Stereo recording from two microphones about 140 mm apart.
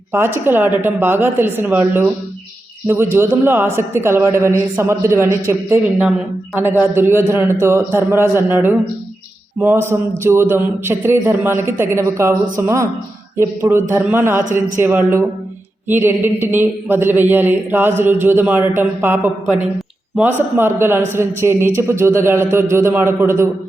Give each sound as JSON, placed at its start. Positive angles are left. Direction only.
{"t": 0.1, "sound": "a man's voice", "side_deg": -15}